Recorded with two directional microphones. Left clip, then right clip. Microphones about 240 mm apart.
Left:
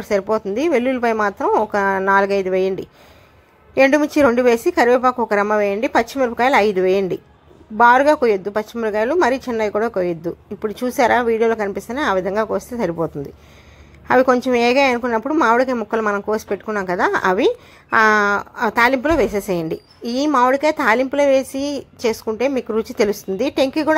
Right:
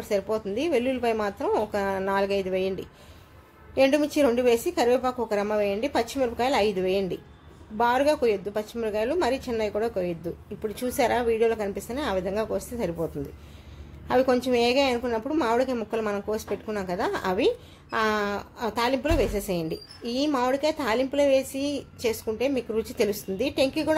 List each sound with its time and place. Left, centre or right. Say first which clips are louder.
0.0 s a woman's voice: left 8 dB; centre